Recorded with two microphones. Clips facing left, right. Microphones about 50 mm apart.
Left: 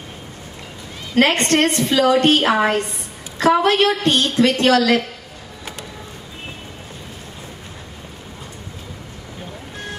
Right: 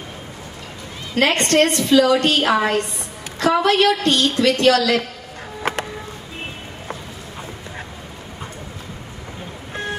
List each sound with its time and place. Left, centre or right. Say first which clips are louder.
1.1 s a woman's voice: left 1 dB; left
5.6 s music: right 11 dB; right